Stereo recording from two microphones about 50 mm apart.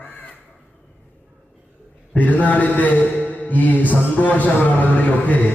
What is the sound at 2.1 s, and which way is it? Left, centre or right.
A man's voice, left.